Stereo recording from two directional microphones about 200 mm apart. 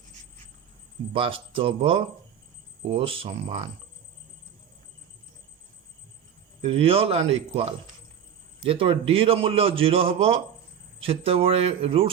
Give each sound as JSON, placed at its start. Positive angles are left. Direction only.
{"t": 1.1, "sound": "a man's voice", "side_deg": -25}
{"t": 6.6, "sound": "a man's voice", "side_deg": -30}